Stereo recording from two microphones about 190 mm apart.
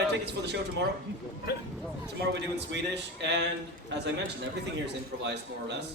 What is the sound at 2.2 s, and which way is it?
A man's voice, 65° right (ahead or behind).